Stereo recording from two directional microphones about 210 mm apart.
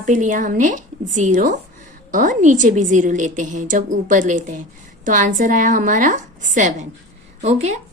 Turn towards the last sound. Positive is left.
turn(degrees=-35)  # may be behind; listen again after turning